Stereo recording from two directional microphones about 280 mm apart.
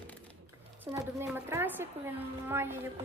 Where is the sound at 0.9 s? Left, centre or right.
Centre.